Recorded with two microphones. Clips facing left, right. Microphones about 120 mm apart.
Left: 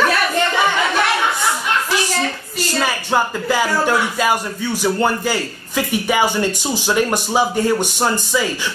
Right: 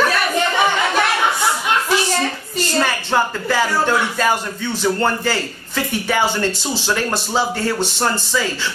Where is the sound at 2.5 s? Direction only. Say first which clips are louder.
Right 3 dB; 5° left (ahead or behind).